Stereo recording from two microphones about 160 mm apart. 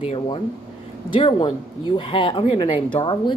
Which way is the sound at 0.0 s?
40° left (ahead or behind).